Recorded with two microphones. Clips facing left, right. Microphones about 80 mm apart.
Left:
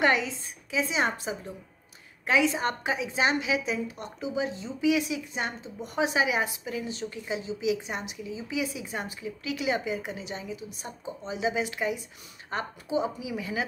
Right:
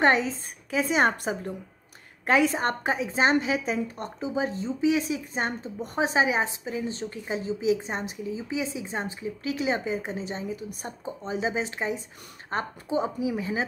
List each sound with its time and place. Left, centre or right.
0.0 s a woman's voice: right